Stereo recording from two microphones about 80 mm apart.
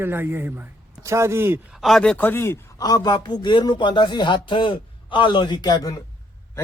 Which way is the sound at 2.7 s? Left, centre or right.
Left.